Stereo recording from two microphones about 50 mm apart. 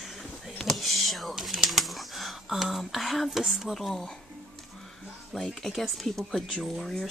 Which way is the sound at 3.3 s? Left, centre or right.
Centre.